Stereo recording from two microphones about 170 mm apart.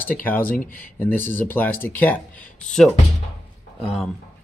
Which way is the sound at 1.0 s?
10° left (ahead or behind).